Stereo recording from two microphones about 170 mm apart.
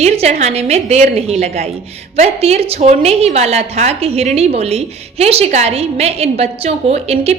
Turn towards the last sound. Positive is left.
turn(degrees=-35)  # may be behind; listen again after turning